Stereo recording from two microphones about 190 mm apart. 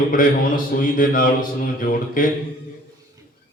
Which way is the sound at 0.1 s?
45° left (ahead or behind).